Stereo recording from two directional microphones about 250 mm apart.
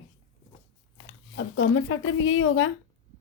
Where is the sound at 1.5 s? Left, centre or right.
Left.